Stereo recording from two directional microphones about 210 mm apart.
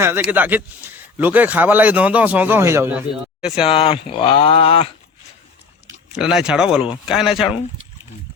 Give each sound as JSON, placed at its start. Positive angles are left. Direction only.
{"t": 0.0, "sound": "a man's voice", "side_deg": -10}
{"t": 3.7, "sound": "speech", "side_deg": 25}
{"t": 6.1, "sound": "speech", "side_deg": -5}